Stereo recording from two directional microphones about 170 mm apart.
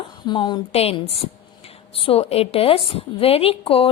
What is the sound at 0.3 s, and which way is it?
A woman's voice, 25° left (ahead or behind).